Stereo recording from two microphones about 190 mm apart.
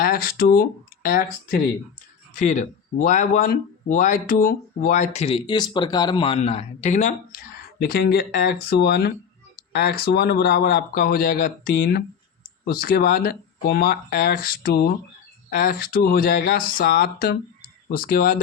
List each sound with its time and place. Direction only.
0.0 s speech: 50° left (ahead or behind)